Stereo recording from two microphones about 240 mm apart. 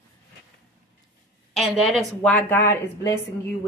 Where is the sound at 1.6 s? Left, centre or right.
Centre.